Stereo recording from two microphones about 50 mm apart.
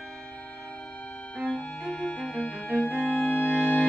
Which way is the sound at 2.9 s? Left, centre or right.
Right.